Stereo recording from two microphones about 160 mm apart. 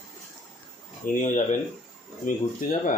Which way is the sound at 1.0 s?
50° left (ahead or behind).